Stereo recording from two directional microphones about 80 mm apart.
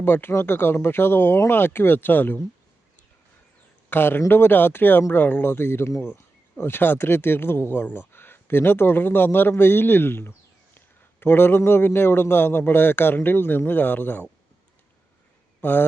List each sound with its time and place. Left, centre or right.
0.0 s speech: left
3.8 s speech: left
15.6 s speech: left